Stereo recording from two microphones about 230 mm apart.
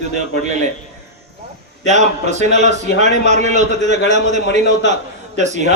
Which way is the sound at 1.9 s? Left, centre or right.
Right.